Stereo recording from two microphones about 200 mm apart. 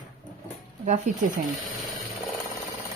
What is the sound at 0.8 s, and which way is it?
Speech, 40° right (ahead or behind).